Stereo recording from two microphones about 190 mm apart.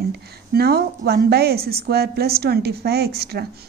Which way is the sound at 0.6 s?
55° right (ahead or behind).